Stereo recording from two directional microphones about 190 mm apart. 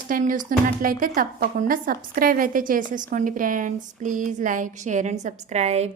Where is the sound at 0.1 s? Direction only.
45° right (ahead or behind).